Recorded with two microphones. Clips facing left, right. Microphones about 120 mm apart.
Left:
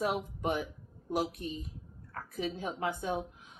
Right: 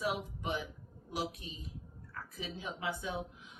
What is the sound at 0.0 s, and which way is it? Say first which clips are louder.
Speech: left 4 dB; 50° left (ahead or behind).